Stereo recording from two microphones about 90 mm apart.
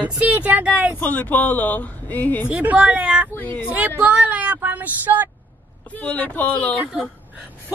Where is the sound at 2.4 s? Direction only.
15° right (ahead or behind).